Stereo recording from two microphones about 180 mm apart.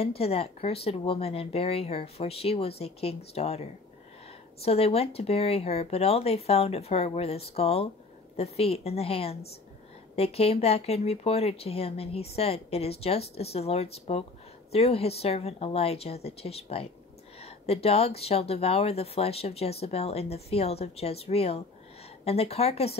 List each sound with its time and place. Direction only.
0.0 s speech: 35° left (ahead or behind)